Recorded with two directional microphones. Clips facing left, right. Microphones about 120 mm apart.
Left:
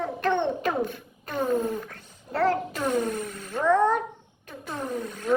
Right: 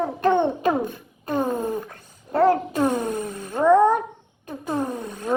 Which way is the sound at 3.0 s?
15° right (ahead or behind).